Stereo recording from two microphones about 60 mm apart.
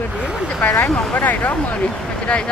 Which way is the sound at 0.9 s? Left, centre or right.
Centre.